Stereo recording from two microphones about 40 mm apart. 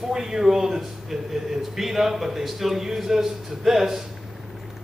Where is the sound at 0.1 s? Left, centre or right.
Centre.